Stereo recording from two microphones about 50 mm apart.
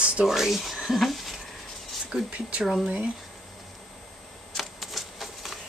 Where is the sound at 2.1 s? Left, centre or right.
Centre.